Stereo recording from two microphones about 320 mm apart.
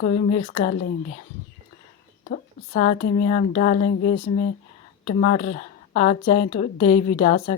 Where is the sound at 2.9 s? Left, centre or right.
Centre.